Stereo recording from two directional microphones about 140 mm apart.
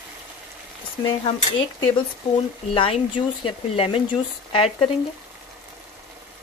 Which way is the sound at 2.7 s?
40° left (ahead or behind).